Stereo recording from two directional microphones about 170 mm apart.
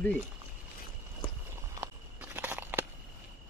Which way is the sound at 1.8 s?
10° right (ahead or behind).